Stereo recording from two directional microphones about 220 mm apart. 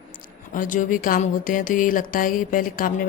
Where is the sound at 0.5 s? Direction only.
35° left (ahead or behind).